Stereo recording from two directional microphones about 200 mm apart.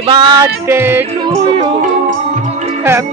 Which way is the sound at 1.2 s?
25° right (ahead or behind).